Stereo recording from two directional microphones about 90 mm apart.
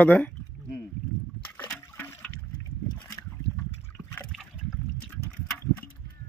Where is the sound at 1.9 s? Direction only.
20° left (ahead or behind).